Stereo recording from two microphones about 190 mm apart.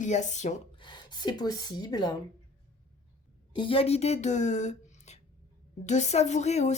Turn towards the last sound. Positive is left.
turn(degrees=35)  # may be behind; listen again after turning